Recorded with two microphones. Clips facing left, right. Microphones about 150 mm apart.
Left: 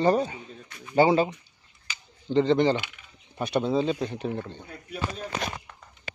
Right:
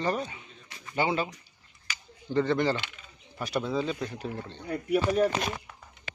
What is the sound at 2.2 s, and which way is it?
Speech, 20° left (ahead or behind).